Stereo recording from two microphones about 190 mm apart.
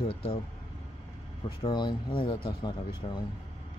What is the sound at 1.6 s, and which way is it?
Speech, 25° left (ahead or behind).